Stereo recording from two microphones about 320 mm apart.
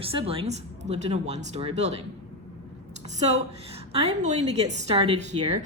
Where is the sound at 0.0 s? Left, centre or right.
Centre.